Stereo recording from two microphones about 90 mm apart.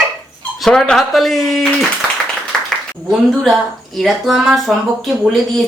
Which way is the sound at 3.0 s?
Centre (ahead or behind).